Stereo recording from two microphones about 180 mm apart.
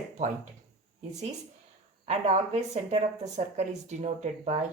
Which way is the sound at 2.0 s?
40° right (ahead or behind).